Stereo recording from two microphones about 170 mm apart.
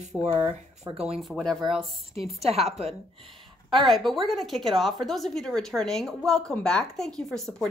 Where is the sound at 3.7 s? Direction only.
Centre (ahead or behind).